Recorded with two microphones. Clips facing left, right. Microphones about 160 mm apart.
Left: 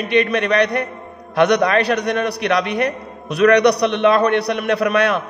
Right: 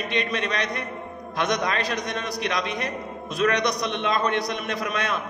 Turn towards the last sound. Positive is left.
turn(degrees=70)  # may be behind; listen again after turning